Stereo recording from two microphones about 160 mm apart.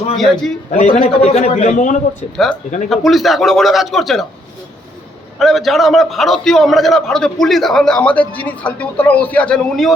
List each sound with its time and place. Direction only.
0.2 s a man's voice: centre (ahead or behind)
0.7 s a man's voice: 45° left (ahead or behind)
2.9 s a man's voice: centre (ahead or behind)
5.4 s a man's voice: centre (ahead or behind)